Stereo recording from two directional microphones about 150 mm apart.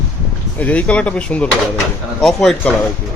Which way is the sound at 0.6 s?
10° left (ahead or behind).